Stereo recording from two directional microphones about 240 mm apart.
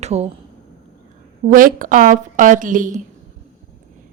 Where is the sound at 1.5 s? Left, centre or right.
Right.